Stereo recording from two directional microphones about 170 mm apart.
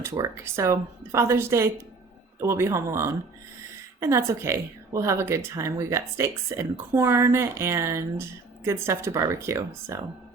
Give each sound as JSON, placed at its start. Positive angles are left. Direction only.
{"t": 0.0, "sound": "a woman's voice", "side_deg": -15}